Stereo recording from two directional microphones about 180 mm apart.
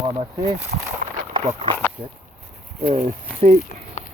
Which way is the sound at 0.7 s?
50° right (ahead or behind).